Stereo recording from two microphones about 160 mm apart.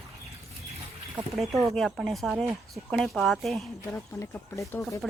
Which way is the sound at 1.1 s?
5° right (ahead or behind).